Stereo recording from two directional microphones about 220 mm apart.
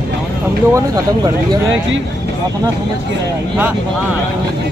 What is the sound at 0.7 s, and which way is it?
Speech, 15° right (ahead or behind).